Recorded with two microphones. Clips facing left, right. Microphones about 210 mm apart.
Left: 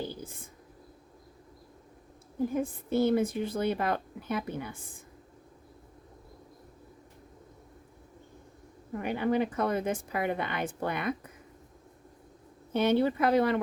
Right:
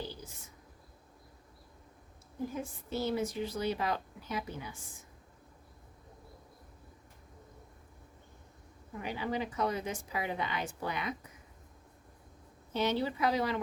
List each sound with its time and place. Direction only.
0.0 s whispering: 50° left (ahead or behind)
2.5 s a woman's voice: 55° left (ahead or behind)
8.9 s a woman's voice: 55° left (ahead or behind)
12.7 s a woman's voice: 55° left (ahead or behind)